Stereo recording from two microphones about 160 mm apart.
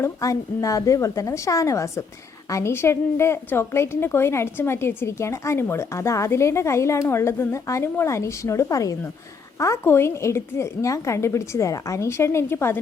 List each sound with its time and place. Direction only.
0.0 s a woman's voice: 20° left (ahead or behind)